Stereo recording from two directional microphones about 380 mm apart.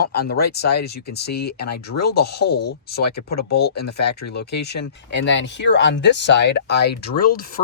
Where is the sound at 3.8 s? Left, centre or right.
Left.